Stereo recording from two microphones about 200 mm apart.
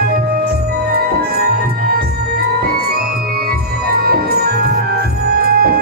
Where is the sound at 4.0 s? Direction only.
50° right (ahead or behind).